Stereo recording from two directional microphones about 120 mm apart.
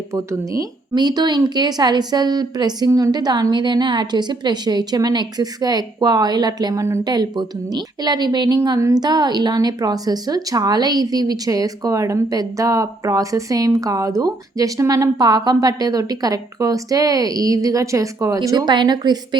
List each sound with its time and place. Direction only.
0.1 s speech: 25° right (ahead or behind)
0.9 s a woman's voice: 35° right (ahead or behind)